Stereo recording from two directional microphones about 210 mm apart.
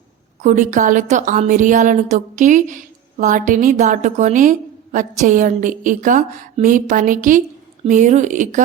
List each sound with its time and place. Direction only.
0.4 s a woman's voice: 35° right (ahead or behind)